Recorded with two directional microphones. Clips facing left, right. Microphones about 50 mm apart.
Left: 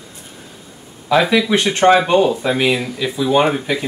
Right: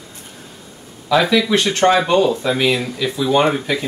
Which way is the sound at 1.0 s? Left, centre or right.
Left.